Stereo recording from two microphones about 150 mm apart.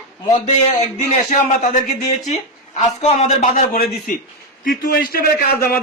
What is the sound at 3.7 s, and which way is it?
A man's voice, 75° left (ahead or behind).